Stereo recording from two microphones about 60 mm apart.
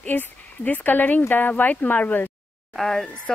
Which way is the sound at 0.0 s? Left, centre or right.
Left.